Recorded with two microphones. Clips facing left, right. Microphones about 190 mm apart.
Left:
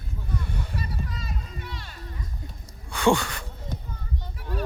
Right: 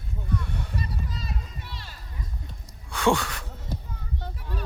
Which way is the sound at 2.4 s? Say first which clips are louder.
Left 2 dB; centre (ahead or behind).